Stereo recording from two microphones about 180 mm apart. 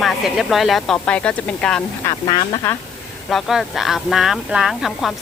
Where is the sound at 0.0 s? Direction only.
Centre (ahead or behind).